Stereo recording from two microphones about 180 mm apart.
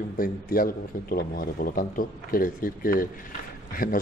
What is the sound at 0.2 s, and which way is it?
A man's voice, 55° left (ahead or behind).